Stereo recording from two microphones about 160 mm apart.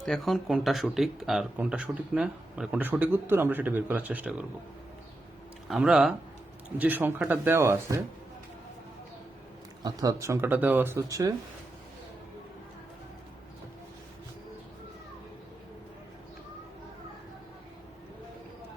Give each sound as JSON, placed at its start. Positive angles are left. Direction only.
{"t": 0.0, "sound": "speech", "side_deg": 0}
{"t": 5.6, "sound": "speech", "side_deg": -5}
{"t": 9.8, "sound": "speech", "side_deg": -20}